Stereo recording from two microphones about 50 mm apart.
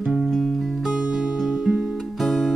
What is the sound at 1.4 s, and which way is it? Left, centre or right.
Music, centre.